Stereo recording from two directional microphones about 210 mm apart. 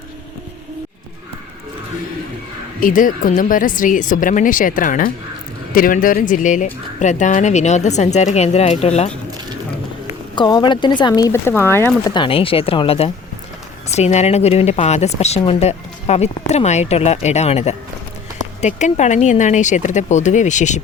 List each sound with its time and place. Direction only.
2.8 s speech: 40° left (ahead or behind)
10.3 s speech: 20° left (ahead or behind)
12.1 s speech: 25° left (ahead or behind)